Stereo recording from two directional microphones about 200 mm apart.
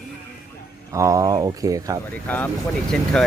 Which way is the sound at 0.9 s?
15° right (ahead or behind).